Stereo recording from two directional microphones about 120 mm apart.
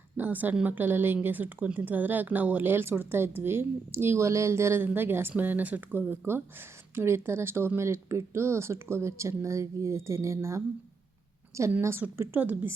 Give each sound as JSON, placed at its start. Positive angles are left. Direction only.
{"t": 0.2, "sound": "a woman's voice", "side_deg": -15}
{"t": 11.7, "sound": "speech", "side_deg": -20}